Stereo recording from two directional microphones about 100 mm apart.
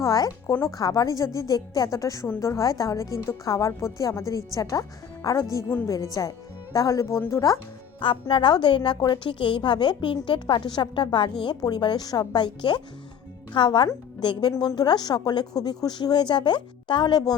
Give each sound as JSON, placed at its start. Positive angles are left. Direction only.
{"t": 0.0, "sound": "a woman's voice", "side_deg": 35}
{"t": 7.9, "sound": "a woman's voice", "side_deg": 55}